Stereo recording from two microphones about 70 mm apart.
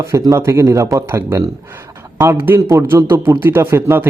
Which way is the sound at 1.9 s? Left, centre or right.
Right.